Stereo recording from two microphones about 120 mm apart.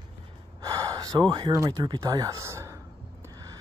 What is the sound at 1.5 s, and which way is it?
Speech, 35° right (ahead or behind).